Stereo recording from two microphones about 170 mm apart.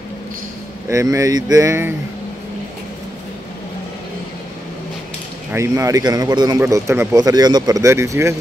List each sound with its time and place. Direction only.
0.8 s speech: 20° right (ahead or behind)
5.5 s speech: 15° right (ahead or behind)